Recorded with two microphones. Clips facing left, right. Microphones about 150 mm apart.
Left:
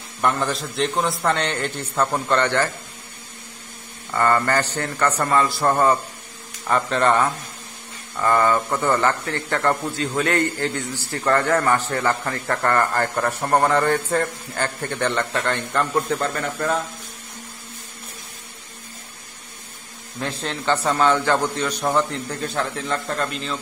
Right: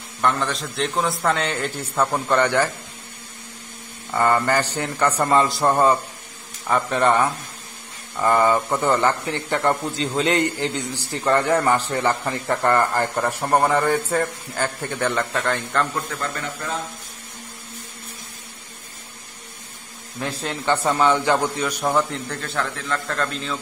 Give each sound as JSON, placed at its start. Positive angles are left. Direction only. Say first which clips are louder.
{"t": 0.2, "sound": "a man's voice", "louder": "even", "side_deg": 5}
{"t": 4.1, "sound": "a man's voice", "louder": "even", "side_deg": -15}
{"t": 16.1, "sound": "speech", "louder": "left 6 dB", "side_deg": 30}
{"t": 20.2, "sound": "a man's voice", "louder": "even", "side_deg": -10}
{"t": 21.8, "sound": "a man's voice", "louder": "even", "side_deg": 0}
{"t": 22.4, "sound": "a man's voice", "louder": "left 4 dB", "side_deg": 20}